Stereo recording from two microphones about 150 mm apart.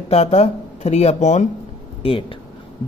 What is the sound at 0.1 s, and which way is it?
Speech, 45° left (ahead or behind).